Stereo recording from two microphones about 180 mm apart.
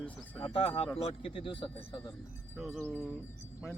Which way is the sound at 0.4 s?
30° left (ahead or behind).